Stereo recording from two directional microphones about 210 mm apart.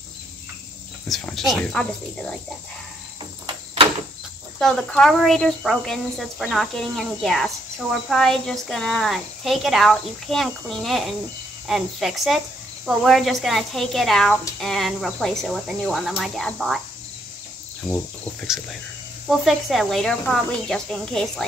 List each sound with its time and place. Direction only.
1.0 s speech: centre (ahead or behind)
3.4 s a sound: 25° right (ahead or behind)
4.6 s speech: centre (ahead or behind)
19.2 s speech: centre (ahead or behind)